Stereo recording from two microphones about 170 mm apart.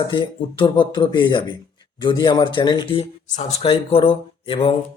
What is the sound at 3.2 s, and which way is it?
Speech, 45° left (ahead or behind).